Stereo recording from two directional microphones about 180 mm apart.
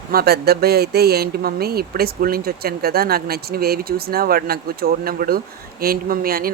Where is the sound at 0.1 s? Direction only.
60° right (ahead or behind).